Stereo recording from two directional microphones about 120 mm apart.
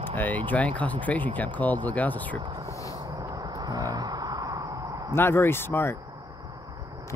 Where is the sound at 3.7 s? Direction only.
30° right (ahead or behind).